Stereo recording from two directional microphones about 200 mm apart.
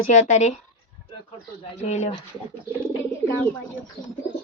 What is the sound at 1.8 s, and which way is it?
Speech, 35° left (ahead or behind).